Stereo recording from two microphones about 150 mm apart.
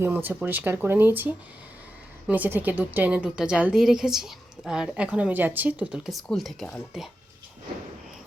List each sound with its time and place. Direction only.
0.0 s a woman's voice: 15° right (ahead or behind); by 6.8 s 5° left (ahead or behind)